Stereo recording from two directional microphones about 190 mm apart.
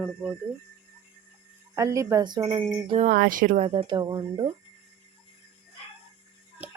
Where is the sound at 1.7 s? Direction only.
15° right (ahead or behind).